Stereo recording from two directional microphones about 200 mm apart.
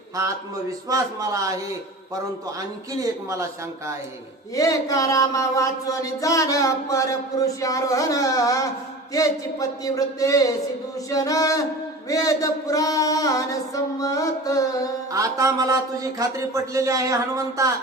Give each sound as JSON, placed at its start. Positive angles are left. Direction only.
{"t": 0.9, "sound": "speech", "side_deg": -15}
{"t": 3.0, "sound": "speech", "side_deg": -15}
{"t": 4.5, "sound": "a sound", "side_deg": 15}
{"t": 15.1, "sound": "speech", "side_deg": -15}